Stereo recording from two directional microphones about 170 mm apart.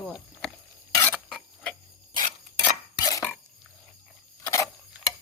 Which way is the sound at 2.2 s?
20° left (ahead or behind).